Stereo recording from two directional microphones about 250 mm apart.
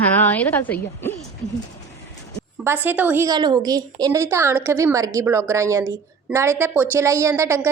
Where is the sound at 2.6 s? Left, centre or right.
Centre.